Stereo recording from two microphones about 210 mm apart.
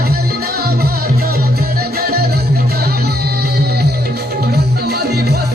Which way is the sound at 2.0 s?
45° right (ahead or behind).